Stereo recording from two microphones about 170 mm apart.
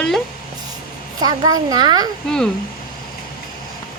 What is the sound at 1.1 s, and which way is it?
Speech, 25° right (ahead or behind).